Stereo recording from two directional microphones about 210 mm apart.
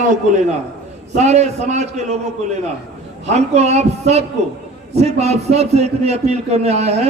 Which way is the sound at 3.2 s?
30° right (ahead or behind).